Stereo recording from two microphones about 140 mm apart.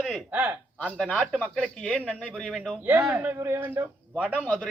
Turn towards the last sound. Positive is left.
turn(degrees=10)  # may be behind; listen again after turning